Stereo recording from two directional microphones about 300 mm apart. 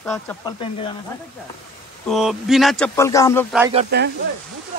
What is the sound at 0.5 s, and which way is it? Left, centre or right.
Speech, centre.